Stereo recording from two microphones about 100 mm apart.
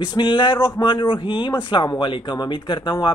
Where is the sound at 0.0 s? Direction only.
50° left (ahead or behind).